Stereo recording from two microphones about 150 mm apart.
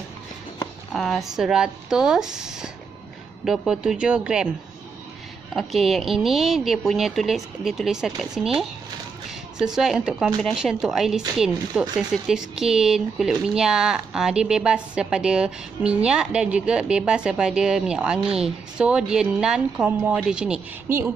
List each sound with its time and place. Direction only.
0.9 s speech: centre (ahead or behind)
5.5 s speech: centre (ahead or behind)
9.8 s speech: 5° right (ahead or behind)